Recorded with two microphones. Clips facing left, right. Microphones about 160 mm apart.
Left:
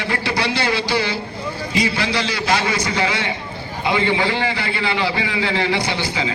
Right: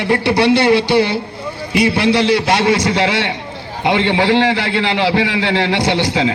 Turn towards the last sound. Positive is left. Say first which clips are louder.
# right 7 dB
turn(degrees=-70)  # may be behind; listen again after turning